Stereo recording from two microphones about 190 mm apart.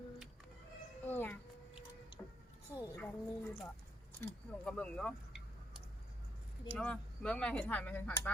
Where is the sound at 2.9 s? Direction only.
10° left (ahead or behind).